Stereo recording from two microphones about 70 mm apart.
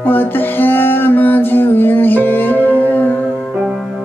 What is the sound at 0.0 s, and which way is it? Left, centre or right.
Music, left.